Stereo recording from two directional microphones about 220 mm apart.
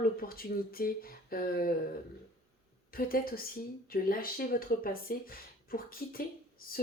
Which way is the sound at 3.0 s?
40° left (ahead or behind).